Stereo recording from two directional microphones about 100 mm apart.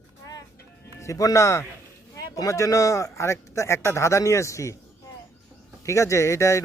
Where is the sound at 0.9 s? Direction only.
30° left (ahead or behind).